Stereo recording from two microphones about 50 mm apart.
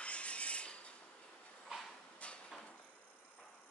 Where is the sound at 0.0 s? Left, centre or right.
Left.